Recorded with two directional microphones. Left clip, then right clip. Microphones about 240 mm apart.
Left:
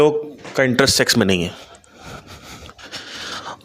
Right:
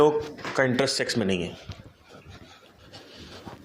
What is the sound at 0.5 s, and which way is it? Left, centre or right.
Speech, left.